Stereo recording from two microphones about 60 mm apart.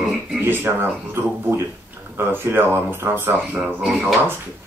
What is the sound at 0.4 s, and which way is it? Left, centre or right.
Speech, right.